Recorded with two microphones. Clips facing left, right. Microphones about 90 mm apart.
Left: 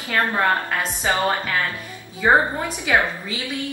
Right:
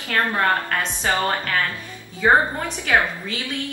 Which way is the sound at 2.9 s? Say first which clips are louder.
Even; 15° left (ahead or behind).